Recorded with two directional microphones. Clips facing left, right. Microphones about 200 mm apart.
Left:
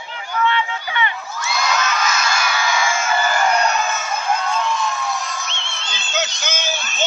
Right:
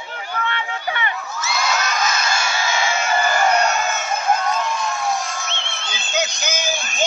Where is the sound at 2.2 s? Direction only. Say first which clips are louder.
Left 1 dB; 25° right (ahead or behind).